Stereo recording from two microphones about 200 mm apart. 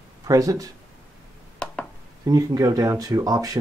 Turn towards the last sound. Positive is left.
turn(degrees=-20)  # may be behind; listen again after turning